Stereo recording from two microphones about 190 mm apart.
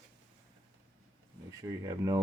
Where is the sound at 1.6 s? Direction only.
20° right (ahead or behind).